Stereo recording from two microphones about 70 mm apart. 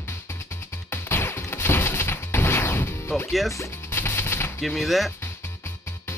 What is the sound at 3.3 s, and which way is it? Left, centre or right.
Speech, centre.